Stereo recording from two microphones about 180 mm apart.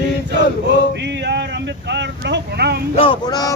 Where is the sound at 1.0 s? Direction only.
70° right (ahead or behind).